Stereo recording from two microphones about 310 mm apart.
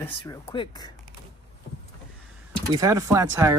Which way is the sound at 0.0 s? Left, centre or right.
Centre.